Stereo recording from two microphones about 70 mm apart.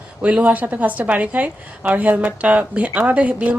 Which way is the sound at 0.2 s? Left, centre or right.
Centre.